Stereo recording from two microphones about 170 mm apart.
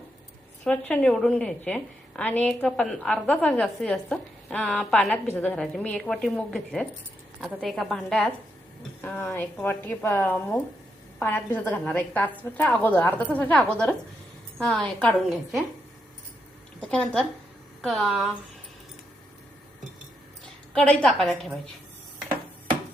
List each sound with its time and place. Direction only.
0.6 s a woman's voice: 5° left (ahead or behind)
16.8 s a woman's voice: 5° left (ahead or behind)
20.7 s a woman's voice: 5° left (ahead or behind)